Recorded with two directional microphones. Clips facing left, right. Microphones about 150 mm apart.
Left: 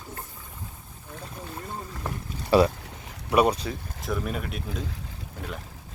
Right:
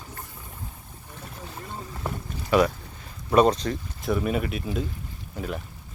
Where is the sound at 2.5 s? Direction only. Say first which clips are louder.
Left 1 dB; 35° left (ahead or behind).